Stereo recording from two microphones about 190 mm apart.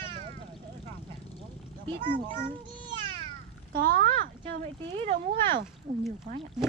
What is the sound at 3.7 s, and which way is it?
Speech, 50° right (ahead or behind).